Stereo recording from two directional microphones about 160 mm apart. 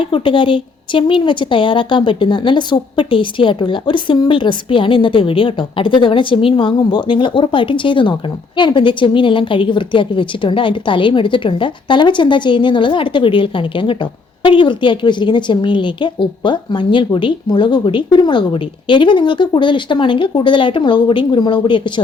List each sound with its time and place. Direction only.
0.0 s a woman's voice: 30° left (ahead or behind)